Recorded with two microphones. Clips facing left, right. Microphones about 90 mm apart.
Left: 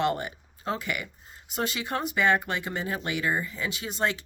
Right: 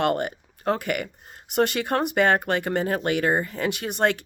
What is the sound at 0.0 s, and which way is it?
Speech, 55° right (ahead or behind).